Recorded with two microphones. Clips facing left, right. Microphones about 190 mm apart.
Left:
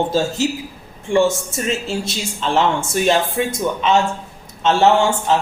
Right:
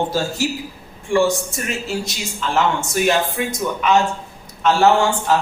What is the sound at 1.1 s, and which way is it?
A man's voice, 25° left (ahead or behind).